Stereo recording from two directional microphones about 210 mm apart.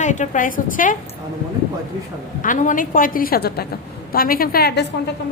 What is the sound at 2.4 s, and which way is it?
A woman's voice, 40° left (ahead or behind).